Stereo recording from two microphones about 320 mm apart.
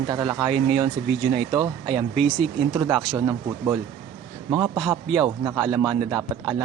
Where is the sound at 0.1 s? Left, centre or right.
Centre.